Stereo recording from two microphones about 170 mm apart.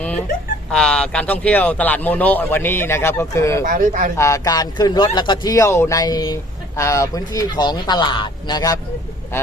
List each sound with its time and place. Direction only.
0.7 s a man's voice: 5° left (ahead or behind)
3.7 s speech: 50° right (ahead or behind)
4.2 s a man's voice: 20° left (ahead or behind)